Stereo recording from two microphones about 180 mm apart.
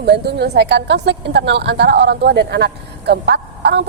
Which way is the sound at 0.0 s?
65° right (ahead or behind).